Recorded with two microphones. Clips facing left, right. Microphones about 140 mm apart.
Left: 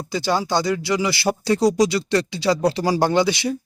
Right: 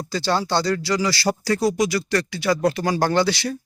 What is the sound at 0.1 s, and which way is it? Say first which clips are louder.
Speech: left 1 dB; 15° left (ahead or behind).